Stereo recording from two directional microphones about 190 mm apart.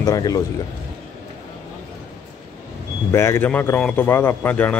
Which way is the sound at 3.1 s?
15° left (ahead or behind).